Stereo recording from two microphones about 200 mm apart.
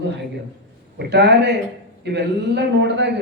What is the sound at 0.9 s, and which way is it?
Speech, 60° right (ahead or behind).